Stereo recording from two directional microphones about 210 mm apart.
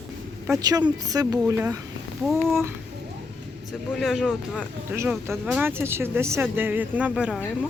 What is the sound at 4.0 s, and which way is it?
Speech, centre (ahead or behind).